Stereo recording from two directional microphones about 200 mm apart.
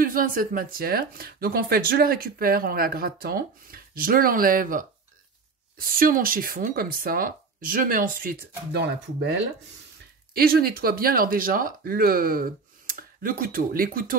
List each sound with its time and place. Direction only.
0.0 s speech: 45° right (ahead or behind)
10.3 s speech: 50° right (ahead or behind)